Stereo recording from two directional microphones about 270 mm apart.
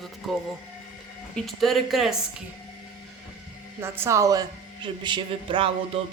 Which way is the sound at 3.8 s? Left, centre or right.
Centre.